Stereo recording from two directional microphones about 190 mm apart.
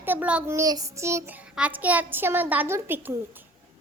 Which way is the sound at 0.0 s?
10° right (ahead or behind).